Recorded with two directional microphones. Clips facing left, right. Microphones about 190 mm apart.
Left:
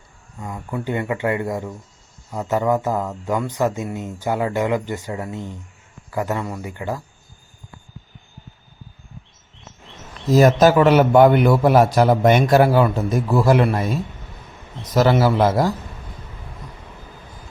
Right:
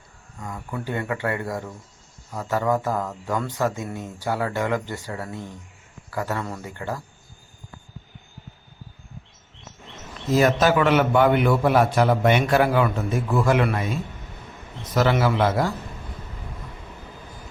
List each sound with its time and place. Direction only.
0.4 s speech: 20° left (ahead or behind)
10.3 s a man's voice: 40° left (ahead or behind)